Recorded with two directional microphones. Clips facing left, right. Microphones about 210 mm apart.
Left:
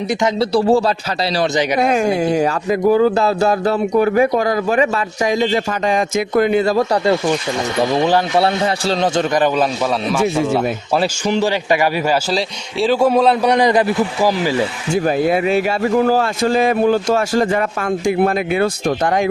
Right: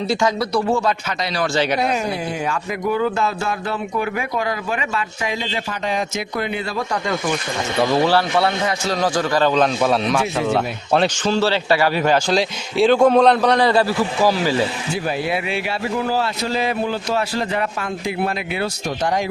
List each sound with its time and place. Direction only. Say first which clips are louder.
0.1 s a man's voice: left 3 dB; 20° left (ahead or behind)
0.5 s speech: left 5 dB; 35° left (ahead or behind)
1.8 s speech: left 6 dB; 50° left (ahead or behind); by 7.2 s 35° left (ahead or behind)
7.8 s a man's voice: left 1 dB; 15° left (ahead or behind)
8.4 s a man's voice: left 3 dB; 30° left (ahead or behind)
9.6 s a man's voice: even; centre (ahead or behind)
14.9 s a man's voice: left 9 dB; 45° left (ahead or behind)